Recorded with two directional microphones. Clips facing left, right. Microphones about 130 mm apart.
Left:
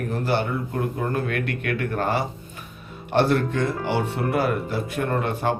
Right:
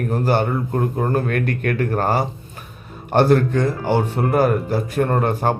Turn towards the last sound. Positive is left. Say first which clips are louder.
# right 4 dB
turn(degrees=-45)  # may be behind; listen again after turning